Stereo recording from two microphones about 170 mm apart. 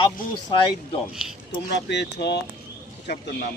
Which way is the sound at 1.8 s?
85° left.